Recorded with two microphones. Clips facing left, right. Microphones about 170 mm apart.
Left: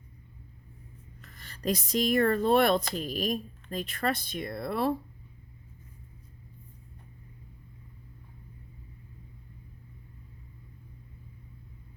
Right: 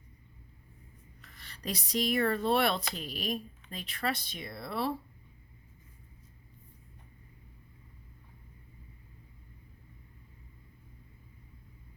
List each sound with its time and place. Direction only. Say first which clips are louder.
1.2 s speech: left 9 dB; 45° left (ahead or behind)